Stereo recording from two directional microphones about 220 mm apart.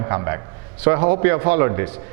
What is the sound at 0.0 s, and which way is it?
A man's voice, 15° right (ahead or behind).